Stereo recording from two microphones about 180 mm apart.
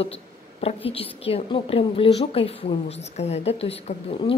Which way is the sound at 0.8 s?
30° left (ahead or behind).